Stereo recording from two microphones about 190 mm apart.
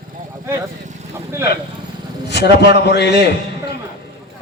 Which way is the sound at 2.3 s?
60° left (ahead or behind).